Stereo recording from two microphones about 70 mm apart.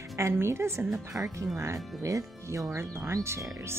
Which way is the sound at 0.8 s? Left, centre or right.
Centre.